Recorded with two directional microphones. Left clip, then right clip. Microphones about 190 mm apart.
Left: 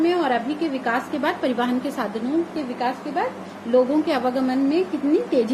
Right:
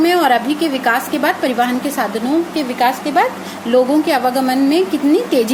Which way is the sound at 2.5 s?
35° right (ahead or behind).